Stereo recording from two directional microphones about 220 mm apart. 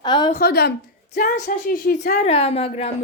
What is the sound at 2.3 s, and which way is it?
Speech, 25° left (ahead or behind).